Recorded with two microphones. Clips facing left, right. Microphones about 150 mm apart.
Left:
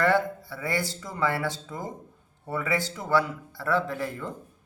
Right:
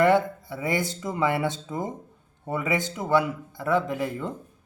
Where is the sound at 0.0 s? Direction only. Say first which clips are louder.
Right 4 dB; 20° right (ahead or behind).